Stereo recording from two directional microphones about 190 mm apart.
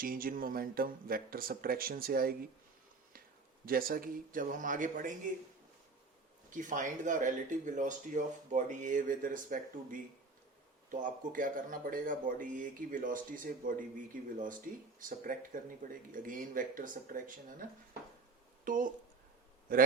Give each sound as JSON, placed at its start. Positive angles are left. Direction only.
{"t": 0.0, "sound": "speech", "side_deg": -50}
{"t": 3.7, "sound": "speech", "side_deg": -50}
{"t": 6.5, "sound": "speech", "side_deg": -45}